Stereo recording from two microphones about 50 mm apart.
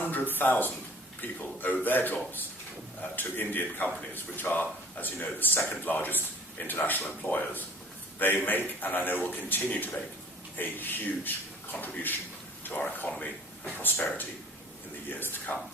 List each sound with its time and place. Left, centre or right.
0.0 s speech: left
15.1 s speech: left